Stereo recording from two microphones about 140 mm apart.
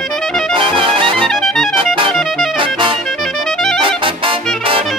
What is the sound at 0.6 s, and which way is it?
Music, 40° right (ahead or behind).